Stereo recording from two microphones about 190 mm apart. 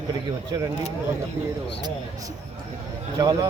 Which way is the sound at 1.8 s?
20° right (ahead or behind).